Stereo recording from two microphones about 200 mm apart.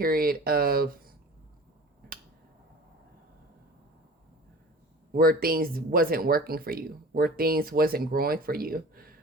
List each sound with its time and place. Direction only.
0.0 s speech: 45° right (ahead or behind)
5.1 s speech: 45° right (ahead or behind)